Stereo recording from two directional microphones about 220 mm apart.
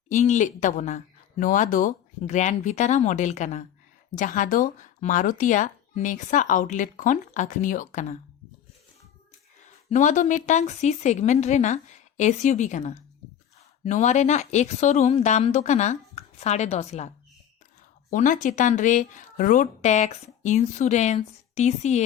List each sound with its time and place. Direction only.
0.1 s speech: 30° left (ahead or behind)
9.9 s speech: 35° left (ahead or behind)
18.1 s speech: 35° left (ahead or behind)